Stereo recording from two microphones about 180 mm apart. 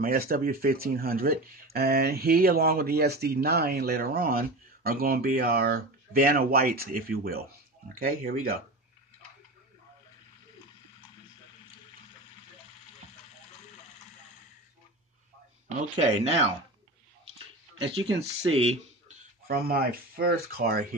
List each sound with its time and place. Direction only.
0.0 s speech: 55° right (ahead or behind)
16.0 s speech: 35° right (ahead or behind)
18.5 s speech: 35° right (ahead or behind)
19.4 s speech: 60° right (ahead or behind)